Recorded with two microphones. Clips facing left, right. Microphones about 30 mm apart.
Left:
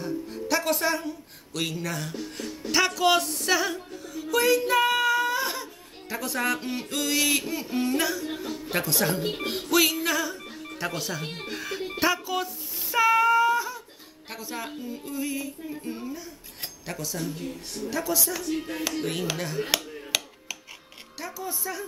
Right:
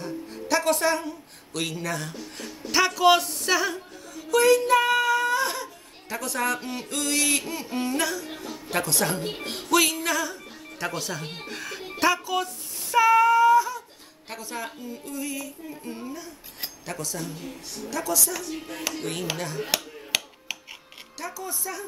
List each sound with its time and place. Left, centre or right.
0.0 s speech: centre
7.4 s a sound: centre
8.7 s speech: centre
12.9 s female singing: centre
14.3 s a woman's voice: centre
15.8 s a woman's voice: centre
17.4 s speech: left
17.9 s a woman's voice: centre
20.1 s a sound: centre
21.2 s a woman's voice: centre